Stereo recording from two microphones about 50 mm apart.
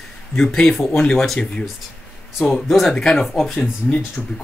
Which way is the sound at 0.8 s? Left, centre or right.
Centre.